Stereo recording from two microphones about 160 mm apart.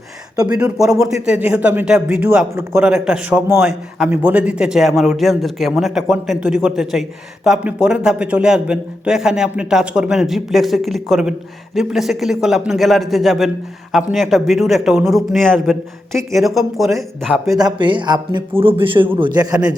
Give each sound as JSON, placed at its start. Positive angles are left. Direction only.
{"t": 0.6, "sound": "a man's voice", "side_deg": -5}
{"t": 17.6, "sound": "a man's voice", "side_deg": -30}